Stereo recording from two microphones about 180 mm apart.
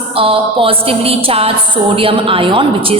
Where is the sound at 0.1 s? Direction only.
30° right (ahead or behind).